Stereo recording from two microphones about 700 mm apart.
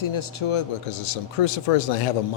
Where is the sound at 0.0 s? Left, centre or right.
Left.